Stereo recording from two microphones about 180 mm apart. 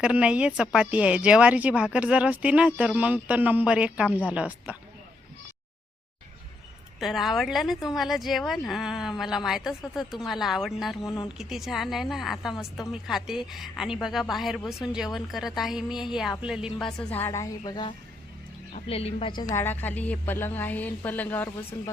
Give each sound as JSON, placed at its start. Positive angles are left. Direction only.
{"t": 0.0, "sound": "speech", "side_deg": -5}
{"t": 7.0, "sound": "speech", "side_deg": 0}
{"t": 16.7, "sound": "a woman's voice", "side_deg": 5}
{"t": 17.6, "sound": "a woman's voice", "side_deg": 25}